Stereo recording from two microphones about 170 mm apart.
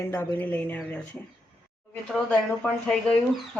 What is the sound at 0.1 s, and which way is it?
Speech, 10° left (ahead or behind).